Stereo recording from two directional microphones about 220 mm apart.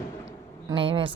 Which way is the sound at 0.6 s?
25° right (ahead or behind).